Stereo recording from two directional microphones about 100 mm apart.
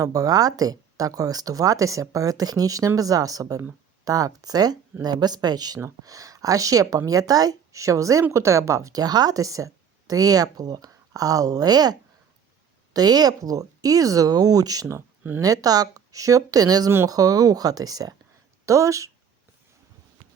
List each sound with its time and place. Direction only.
0.0 s speech: 35° right (ahead or behind)